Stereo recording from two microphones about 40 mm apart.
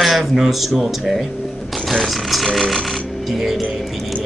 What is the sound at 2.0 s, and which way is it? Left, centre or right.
Speech, centre.